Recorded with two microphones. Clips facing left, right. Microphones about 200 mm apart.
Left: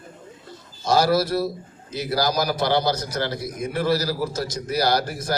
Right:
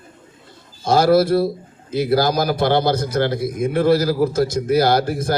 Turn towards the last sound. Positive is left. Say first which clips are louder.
# right 5 dB
turn(degrees=-55)  # may be behind; listen again after turning